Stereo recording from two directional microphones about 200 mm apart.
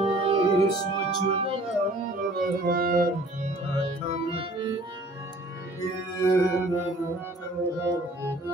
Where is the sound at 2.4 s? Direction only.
45° right (ahead or behind).